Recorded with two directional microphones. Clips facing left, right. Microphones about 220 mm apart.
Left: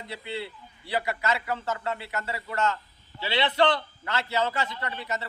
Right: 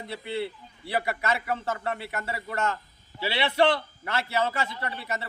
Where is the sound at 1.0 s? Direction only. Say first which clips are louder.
Even; 30° right (ahead or behind).